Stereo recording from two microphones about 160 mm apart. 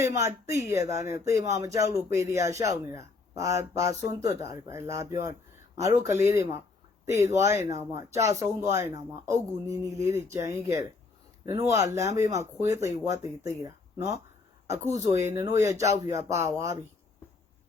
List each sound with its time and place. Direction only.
0.0 s speech: 20° right (ahead or behind)